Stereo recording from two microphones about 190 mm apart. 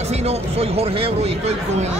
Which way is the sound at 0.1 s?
35° right (ahead or behind).